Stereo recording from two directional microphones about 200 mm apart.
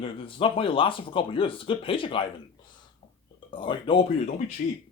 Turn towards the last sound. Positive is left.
turn(degrees=35)  # may be behind; listen again after turning